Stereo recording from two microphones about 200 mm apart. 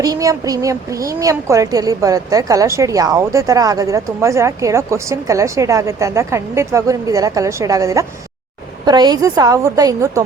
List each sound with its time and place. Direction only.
0.0 s a woman's voice: 15° right (ahead or behind)